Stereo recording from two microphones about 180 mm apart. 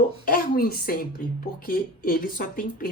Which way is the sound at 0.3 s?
55° left (ahead or behind).